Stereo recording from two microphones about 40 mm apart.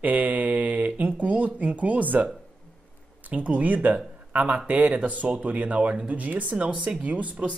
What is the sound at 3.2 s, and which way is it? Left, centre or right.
Speech, right.